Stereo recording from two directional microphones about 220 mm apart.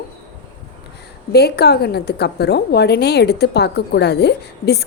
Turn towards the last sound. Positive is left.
turn(degrees=50)  # may be behind; listen again after turning